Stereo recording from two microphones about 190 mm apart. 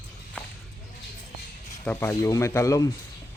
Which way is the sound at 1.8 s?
10° left (ahead or behind).